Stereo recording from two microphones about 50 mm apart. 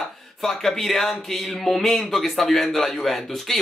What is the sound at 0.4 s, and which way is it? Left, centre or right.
Speech, centre.